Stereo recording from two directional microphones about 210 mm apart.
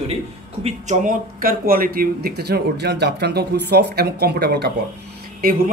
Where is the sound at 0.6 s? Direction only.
30° right (ahead or behind); by 4.7 s 50° right (ahead or behind).